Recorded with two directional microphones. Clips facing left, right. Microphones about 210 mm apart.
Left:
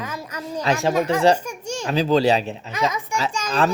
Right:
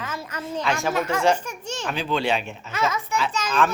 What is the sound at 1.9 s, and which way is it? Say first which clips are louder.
Speech: left 7 dB; 40° left (ahead or behind).